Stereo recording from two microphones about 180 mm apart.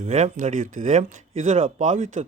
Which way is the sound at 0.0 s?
40° right (ahead or behind).